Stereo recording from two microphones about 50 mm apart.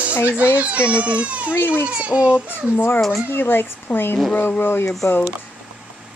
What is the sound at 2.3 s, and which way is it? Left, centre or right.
Speech, left.